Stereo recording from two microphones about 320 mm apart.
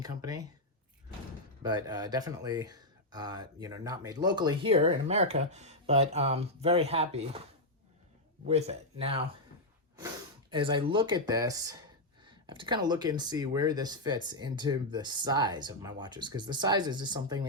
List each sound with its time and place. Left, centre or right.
0.0 s speech: centre
1.6 s speech: centre
8.4 s speech: centre
10.5 s speech: centre